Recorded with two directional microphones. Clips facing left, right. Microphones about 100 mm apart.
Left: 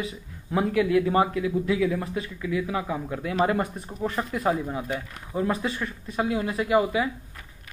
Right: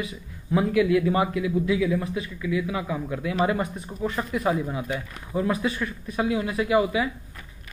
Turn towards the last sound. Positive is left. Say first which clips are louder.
# even
turn(degrees=35)  # may be behind; listen again after turning